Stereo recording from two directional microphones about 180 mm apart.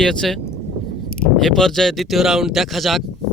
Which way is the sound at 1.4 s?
Centre (ahead or behind).